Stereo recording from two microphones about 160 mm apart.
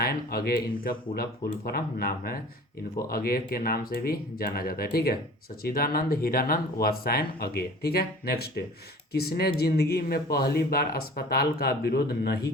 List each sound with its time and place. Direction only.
0.0 s speech: 75° left (ahead or behind)